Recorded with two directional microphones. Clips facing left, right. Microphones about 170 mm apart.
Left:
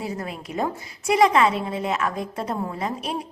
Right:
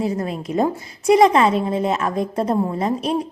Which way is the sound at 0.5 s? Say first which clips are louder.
Right 7 dB; 40° right (ahead or behind).